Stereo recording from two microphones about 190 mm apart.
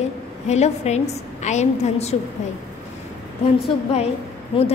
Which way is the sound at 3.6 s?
35° left (ahead or behind).